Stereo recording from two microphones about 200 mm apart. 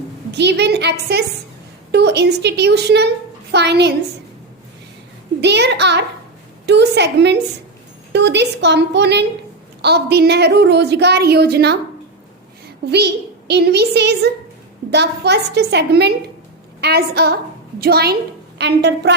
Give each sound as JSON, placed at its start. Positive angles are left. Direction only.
{"t": 0.3, "sound": "a woman's voice", "side_deg": -55}
{"t": 5.4, "sound": "a woman's voice", "side_deg": -55}
{"t": 12.9, "sound": "a woman's voice", "side_deg": -55}